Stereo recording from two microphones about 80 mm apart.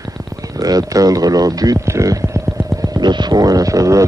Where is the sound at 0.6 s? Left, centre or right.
Right.